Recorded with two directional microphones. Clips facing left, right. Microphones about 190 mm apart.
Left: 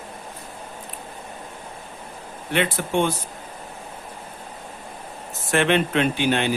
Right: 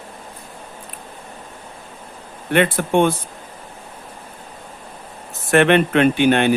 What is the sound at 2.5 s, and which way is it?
Speech, 55° right (ahead or behind).